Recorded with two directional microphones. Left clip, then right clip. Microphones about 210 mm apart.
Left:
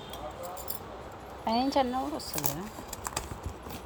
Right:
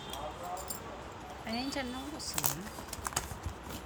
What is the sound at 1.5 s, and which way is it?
Speech, 20° left (ahead or behind).